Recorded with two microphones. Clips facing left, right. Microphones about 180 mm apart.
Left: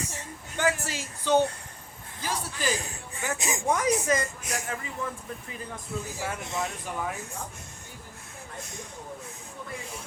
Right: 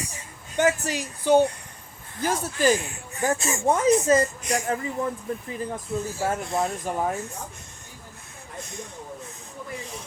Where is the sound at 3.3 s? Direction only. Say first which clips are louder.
Right 3 dB; 15° left (ahead or behind).